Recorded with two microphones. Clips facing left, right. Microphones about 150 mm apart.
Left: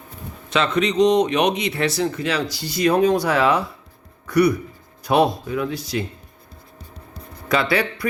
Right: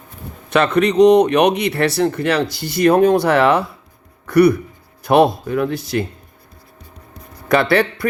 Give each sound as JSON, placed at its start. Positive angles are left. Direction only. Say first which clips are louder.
{"t": 0.5, "sound": "speech", "louder": "right 5 dB", "side_deg": -60}
{"t": 7.4, "sound": "speech", "louder": "right 5 dB", "side_deg": -55}